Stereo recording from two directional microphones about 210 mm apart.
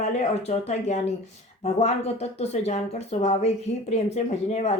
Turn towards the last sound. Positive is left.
turn(degrees=30)  # may be behind; listen again after turning